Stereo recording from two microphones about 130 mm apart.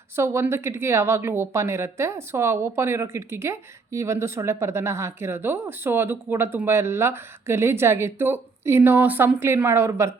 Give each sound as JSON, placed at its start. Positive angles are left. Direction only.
{"t": 0.2, "sound": "speech", "side_deg": -20}